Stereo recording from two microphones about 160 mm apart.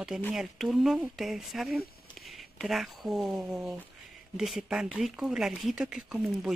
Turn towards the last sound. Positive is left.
turn(degrees=-5)  # may be behind; listen again after turning